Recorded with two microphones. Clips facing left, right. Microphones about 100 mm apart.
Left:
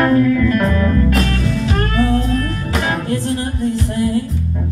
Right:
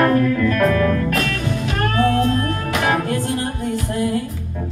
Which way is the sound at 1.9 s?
35° right (ahead or behind).